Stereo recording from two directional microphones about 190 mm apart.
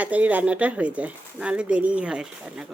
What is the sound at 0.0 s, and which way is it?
Speech, 5° right (ahead or behind).